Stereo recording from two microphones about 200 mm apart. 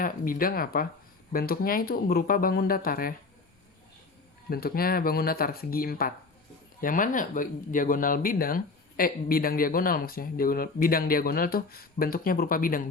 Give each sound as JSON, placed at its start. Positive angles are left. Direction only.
{"t": 0.0, "sound": "speech", "side_deg": 45}
{"t": 4.4, "sound": "speech", "side_deg": 50}